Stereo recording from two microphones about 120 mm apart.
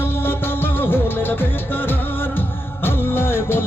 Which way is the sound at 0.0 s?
20° left (ahead or behind).